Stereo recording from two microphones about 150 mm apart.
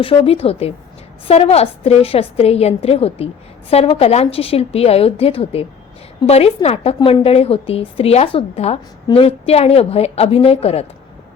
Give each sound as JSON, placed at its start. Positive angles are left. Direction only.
{"t": 0.0, "sound": "a woman's voice", "side_deg": 40}